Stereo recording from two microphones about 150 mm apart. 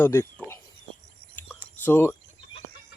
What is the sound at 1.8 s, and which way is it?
Speech, 15° left (ahead or behind).